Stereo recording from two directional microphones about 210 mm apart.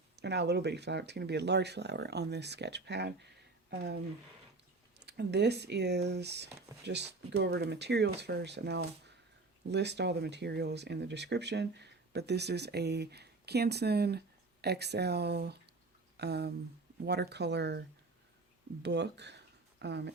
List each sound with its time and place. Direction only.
0.2 s speech: 55° right (ahead or behind)